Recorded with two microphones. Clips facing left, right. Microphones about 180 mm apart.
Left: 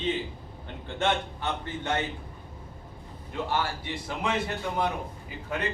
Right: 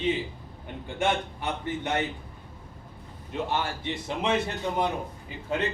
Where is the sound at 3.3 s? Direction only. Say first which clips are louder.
Even; 20° right (ahead or behind).